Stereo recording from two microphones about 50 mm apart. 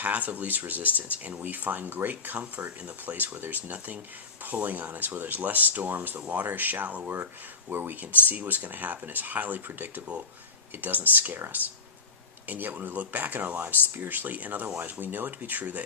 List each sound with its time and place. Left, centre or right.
0.0 s speech: right
8.3 s speech: right
12.5 s speech: right